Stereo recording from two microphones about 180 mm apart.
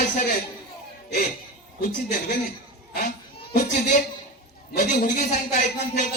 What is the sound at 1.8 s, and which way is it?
Speech, 55° left (ahead or behind).